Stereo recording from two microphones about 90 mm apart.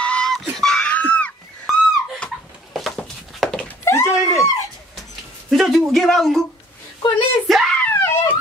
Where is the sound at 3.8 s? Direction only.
30° left (ahead or behind).